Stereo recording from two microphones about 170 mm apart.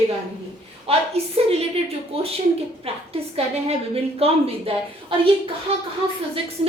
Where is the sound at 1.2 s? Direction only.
35° right (ahead or behind).